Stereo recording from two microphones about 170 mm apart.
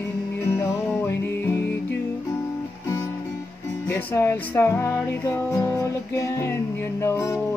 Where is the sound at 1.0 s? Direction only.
15° left (ahead or behind).